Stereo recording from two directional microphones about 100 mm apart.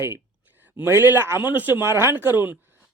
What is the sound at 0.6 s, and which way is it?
A man's voice, 20° right (ahead or behind).